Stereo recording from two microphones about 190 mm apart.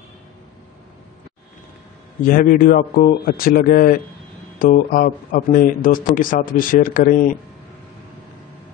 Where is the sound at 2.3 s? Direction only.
50° left (ahead or behind).